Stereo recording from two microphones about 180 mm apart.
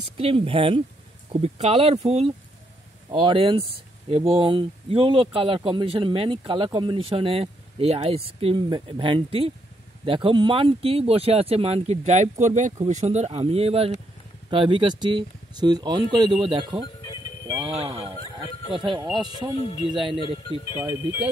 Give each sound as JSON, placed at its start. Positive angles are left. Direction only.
{"t": 0.2, "sound": "speech", "side_deg": -30}
{"t": 19.5, "sound": "speech", "side_deg": 30}
{"t": 19.9, "sound": "speech", "side_deg": -25}
{"t": 20.2, "sound": "speech", "side_deg": 25}